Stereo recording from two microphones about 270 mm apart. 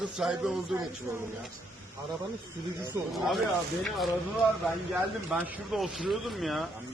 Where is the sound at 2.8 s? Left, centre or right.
Centre.